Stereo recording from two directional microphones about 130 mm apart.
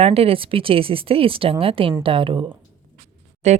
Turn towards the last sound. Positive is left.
turn(degrees=-60)  # may be behind; listen again after turning